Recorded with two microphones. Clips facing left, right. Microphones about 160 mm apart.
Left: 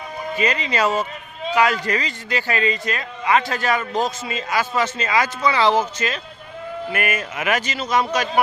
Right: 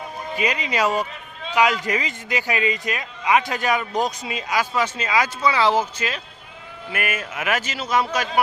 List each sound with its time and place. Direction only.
0.3 s a man's voice: 10° right (ahead or behind)